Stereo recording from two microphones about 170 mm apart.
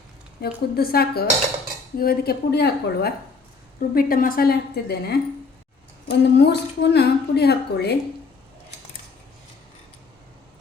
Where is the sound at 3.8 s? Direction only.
60° left (ahead or behind).